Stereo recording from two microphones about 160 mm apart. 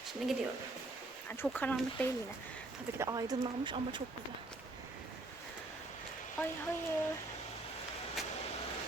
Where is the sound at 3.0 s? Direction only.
20° right (ahead or behind).